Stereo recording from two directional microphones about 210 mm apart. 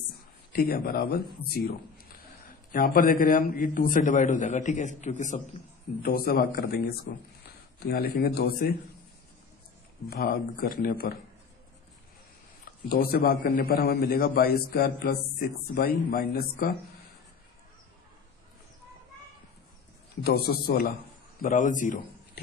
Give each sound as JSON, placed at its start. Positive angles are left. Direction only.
{"t": 0.5, "sound": "a man's voice", "side_deg": 45}
{"t": 2.7, "sound": "a man's voice", "side_deg": 45}
{"t": 10.1, "sound": "a man's voice", "side_deg": 45}
{"t": 12.9, "sound": "a man's voice", "side_deg": 45}
{"t": 20.2, "sound": "a man's voice", "side_deg": 50}